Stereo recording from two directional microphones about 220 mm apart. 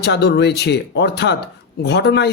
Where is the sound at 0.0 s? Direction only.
50° left (ahead or behind).